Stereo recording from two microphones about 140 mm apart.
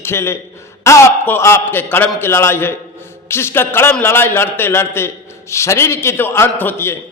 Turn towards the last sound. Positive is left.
turn(degrees=15)  # may be behind; listen again after turning